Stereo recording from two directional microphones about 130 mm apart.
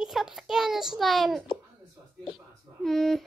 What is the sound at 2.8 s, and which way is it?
Speech, centre (ahead or behind).